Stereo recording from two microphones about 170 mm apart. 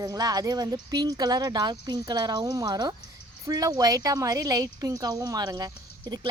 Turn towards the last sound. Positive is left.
turn(degrees=-25)  # may be behind; listen again after turning